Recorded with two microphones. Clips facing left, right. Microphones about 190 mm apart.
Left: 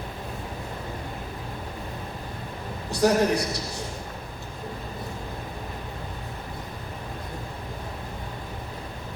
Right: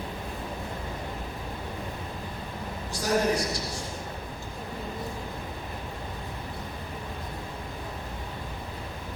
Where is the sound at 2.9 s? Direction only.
65° left (ahead or behind).